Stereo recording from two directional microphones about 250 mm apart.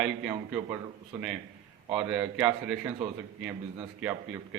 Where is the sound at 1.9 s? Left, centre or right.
Centre.